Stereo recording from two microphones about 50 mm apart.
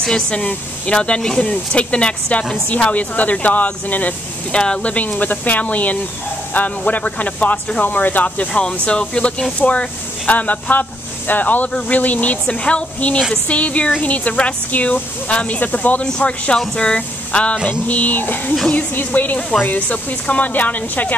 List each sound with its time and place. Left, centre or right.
0.0 s speech: centre
0.4 s speech: left
4.6 s speech: centre
4.9 s speech: left
8.8 s speech: left
16.1 s speech: left
17.6 s speech: left